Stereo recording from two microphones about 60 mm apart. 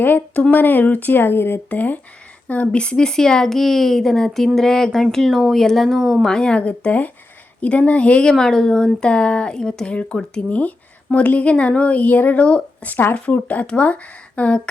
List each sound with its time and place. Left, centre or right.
0.0 s speech: left
1.7 s a woman's voice: left
8.3 s a woman's voice: centre